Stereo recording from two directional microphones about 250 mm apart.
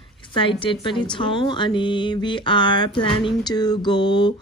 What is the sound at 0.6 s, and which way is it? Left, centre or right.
Speech, centre.